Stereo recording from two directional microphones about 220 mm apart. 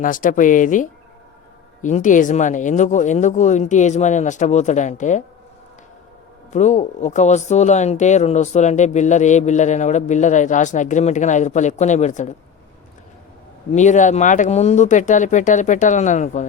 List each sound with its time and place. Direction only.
0.0 s speech: 35° left (ahead or behind)
6.5 s speech: 30° left (ahead or behind)
13.7 s speech: 35° left (ahead or behind)